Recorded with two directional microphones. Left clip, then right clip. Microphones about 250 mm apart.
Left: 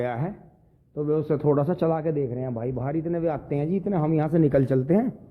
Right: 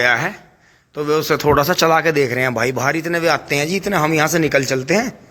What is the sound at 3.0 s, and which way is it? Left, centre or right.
A man's voice, centre.